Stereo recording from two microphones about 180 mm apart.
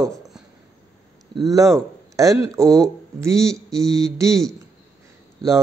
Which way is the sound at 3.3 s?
5° left (ahead or behind).